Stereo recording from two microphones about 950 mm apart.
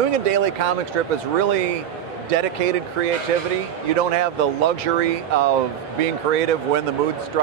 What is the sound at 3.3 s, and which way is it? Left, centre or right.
Speech, right.